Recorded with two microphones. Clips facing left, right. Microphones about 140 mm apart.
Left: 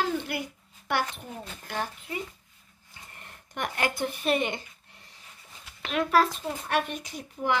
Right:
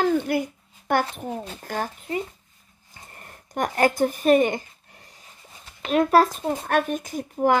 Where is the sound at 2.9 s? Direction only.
40° right (ahead or behind).